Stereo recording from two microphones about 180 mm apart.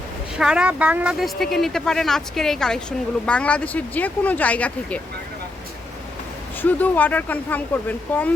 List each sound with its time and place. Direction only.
0.3 s speech: 5° right (ahead or behind)
6.6 s speech: 10° left (ahead or behind)